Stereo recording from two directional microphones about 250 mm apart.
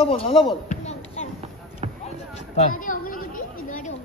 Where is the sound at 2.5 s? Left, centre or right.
Left.